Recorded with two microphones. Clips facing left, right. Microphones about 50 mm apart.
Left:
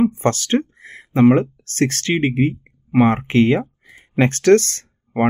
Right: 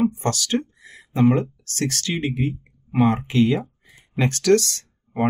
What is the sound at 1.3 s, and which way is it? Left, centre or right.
Speech, left.